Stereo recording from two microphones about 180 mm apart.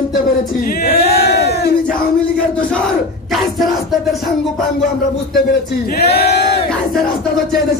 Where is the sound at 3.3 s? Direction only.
Centre (ahead or behind).